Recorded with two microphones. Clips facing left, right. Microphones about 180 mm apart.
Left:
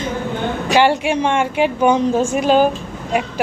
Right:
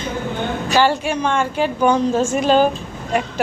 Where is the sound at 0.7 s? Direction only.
20° left (ahead or behind).